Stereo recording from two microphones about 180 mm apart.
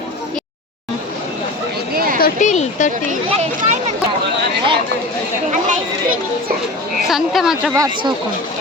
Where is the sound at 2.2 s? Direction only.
45° left (ahead or behind).